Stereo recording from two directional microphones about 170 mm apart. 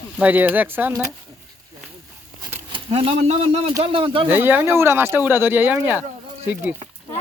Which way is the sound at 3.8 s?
30° right (ahead or behind).